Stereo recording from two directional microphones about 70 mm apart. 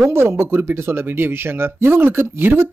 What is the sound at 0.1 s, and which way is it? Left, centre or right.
Speech, right.